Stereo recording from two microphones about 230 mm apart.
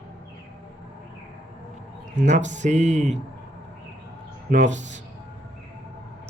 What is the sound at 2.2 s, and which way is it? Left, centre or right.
Speech, right.